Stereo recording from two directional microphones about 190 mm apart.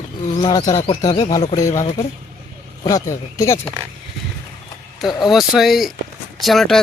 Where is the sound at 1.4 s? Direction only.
35° left (ahead or behind).